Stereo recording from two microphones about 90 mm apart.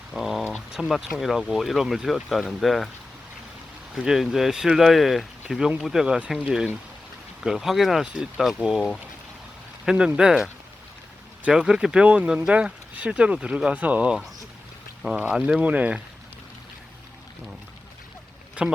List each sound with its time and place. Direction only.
0.1 s a sound: centre (ahead or behind)
0.5 s speech: 5° right (ahead or behind)
3.9 s speech: 5° right (ahead or behind)
18.6 s speech: 15° right (ahead or behind)